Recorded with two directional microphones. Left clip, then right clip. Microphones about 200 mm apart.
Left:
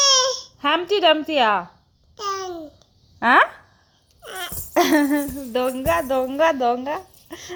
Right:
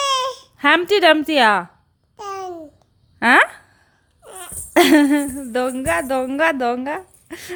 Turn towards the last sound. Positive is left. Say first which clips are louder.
# right 3 dB
turn(degrees=-30)  # may be behind; listen again after turning